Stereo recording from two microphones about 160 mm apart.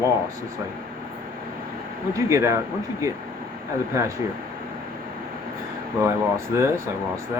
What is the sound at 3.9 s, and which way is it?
Speech, 20° right (ahead or behind).